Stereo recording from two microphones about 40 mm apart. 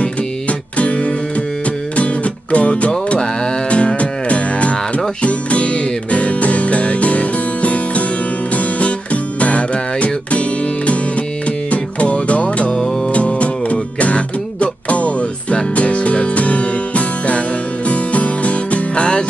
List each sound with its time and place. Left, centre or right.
0.0 s music: left
11.4 s music: left